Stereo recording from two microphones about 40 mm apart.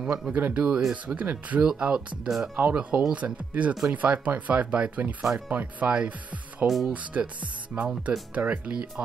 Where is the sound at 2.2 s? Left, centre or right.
Centre.